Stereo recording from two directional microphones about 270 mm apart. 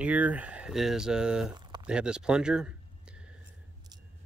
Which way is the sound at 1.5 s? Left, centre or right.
Centre.